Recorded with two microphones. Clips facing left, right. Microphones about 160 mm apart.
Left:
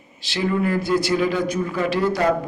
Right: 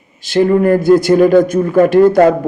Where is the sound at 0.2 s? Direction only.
50° right (ahead or behind).